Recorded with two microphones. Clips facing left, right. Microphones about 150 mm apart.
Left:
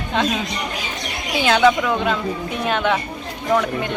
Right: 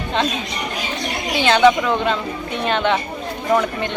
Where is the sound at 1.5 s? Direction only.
5° left (ahead or behind).